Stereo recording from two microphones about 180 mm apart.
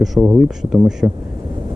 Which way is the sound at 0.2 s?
15° right (ahead or behind).